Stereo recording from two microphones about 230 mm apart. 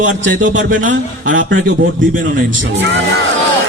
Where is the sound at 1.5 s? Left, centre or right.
Right.